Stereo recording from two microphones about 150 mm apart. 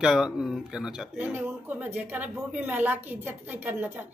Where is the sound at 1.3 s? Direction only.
10° right (ahead or behind).